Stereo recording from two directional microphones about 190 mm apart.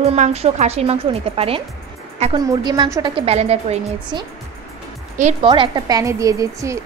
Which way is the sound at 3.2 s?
35° right (ahead or behind).